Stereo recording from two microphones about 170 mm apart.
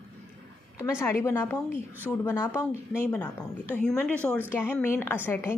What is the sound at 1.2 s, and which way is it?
A woman's voice, 15° left (ahead or behind).